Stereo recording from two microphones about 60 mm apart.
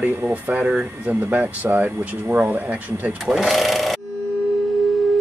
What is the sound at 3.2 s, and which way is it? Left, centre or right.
Sewing machine, centre.